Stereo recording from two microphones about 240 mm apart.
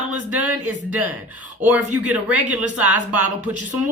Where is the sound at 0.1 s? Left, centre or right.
Centre.